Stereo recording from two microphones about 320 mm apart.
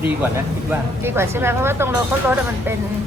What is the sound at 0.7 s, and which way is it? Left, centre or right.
Speech, centre.